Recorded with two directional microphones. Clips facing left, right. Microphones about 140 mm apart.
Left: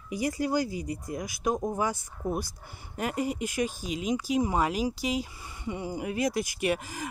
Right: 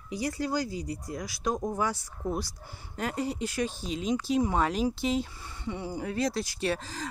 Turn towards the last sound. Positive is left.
turn(degrees=15)  # may be behind; listen again after turning